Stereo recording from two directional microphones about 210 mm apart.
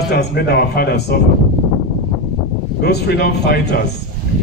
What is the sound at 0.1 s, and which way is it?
A man's voice, 50° left (ahead or behind).